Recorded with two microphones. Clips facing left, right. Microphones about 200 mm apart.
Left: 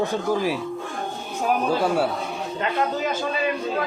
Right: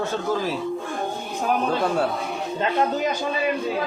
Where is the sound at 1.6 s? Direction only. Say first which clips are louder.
Left 2 dB; 5° left (ahead or behind).